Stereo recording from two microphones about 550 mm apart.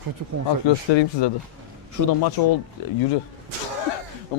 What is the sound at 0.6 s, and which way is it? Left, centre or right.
Speech, left.